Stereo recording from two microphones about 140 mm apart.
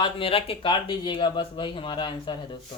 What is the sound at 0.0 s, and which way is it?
Speech, 40° left (ahead or behind).